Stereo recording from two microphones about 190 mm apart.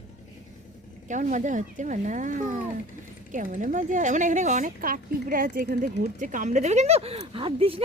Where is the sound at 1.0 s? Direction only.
40° right (ahead or behind).